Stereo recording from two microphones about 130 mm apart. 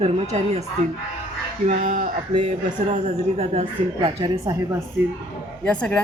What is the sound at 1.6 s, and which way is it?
Speech, 70° right (ahead or behind).